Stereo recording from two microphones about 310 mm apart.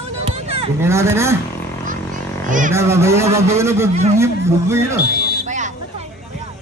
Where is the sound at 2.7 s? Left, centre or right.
Centre.